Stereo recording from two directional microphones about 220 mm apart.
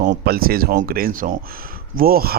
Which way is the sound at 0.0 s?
40° right (ahead or behind).